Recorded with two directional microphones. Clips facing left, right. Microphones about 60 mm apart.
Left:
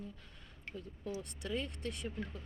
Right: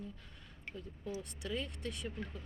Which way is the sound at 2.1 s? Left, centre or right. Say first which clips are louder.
Left 1 dB; centre.